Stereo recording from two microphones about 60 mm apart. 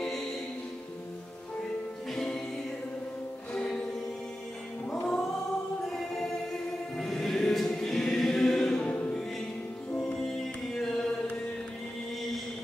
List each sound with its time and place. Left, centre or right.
2.1 s music: centre
3.5 s music: centre
4.8 s music: centre
7.0 s choir: centre
10.2 s music: centre